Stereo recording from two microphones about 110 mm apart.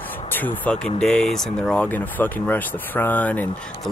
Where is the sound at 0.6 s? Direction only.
5° left (ahead or behind).